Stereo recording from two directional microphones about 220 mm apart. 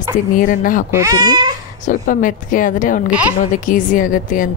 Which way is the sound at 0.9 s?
15° right (ahead or behind).